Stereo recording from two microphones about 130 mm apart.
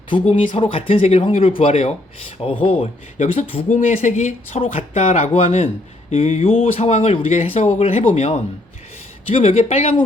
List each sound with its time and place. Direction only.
0.1 s speech: 45° left (ahead or behind)
3.7 s speech: 90° left; by 9.9 s 50° left (ahead or behind)